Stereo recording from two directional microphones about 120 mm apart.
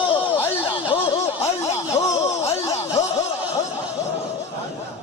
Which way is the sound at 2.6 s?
25° left (ahead or behind).